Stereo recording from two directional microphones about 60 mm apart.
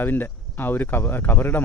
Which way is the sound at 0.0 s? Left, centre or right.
Left.